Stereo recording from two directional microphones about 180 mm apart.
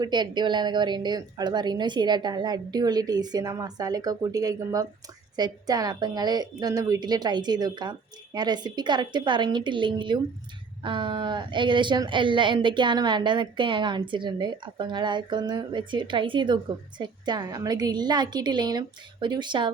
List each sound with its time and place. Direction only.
0.0 s speech: 25° right (ahead or behind)